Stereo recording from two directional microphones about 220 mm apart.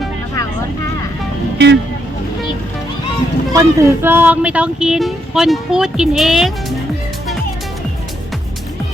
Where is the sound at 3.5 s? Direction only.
10° right (ahead or behind).